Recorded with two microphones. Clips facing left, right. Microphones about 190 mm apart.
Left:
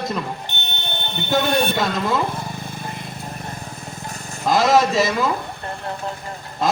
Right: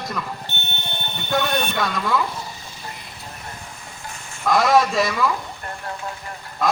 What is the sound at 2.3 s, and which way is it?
Vehicle, 55° left (ahead or behind).